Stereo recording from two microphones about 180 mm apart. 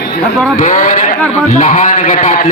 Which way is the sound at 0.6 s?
45° left (ahead or behind).